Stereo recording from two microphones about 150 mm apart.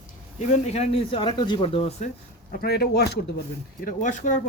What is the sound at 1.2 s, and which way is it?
Speech, 30° left (ahead or behind).